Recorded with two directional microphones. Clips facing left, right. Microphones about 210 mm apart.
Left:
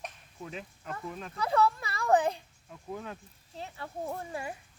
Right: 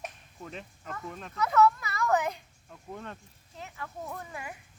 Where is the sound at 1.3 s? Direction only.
30° left (ahead or behind).